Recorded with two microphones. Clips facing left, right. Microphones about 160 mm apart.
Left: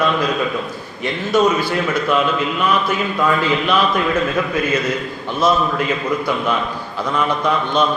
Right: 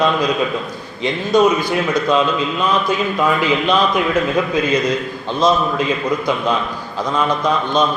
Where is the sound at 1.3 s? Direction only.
15° right (ahead or behind).